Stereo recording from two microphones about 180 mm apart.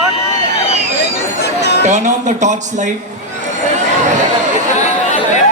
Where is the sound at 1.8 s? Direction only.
40° right (ahead or behind).